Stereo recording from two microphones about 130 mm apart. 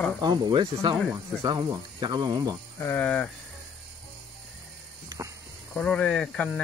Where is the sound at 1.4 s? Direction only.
35° right (ahead or behind).